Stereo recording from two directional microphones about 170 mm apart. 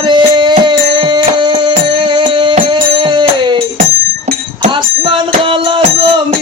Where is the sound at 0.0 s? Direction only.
30° right (ahead or behind).